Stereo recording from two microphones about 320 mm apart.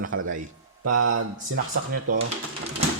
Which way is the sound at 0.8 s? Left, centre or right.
Right.